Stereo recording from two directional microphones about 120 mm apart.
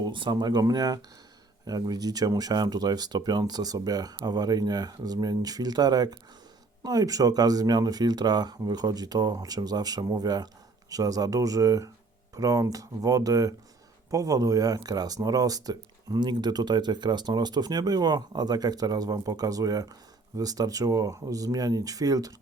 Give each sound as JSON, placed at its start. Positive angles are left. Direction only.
{"t": 0.0, "sound": "speech", "side_deg": -40}